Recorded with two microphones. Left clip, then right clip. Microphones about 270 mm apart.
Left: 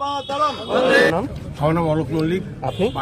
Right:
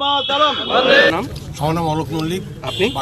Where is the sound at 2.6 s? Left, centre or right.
Left.